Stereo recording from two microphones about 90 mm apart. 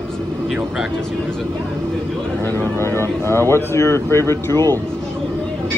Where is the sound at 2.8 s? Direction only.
30° left (ahead or behind).